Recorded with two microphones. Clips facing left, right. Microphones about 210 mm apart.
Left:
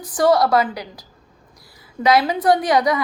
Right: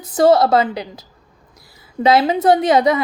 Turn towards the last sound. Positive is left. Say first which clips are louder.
# right 3 dB
turn(degrees=-25)  # may be behind; listen again after turning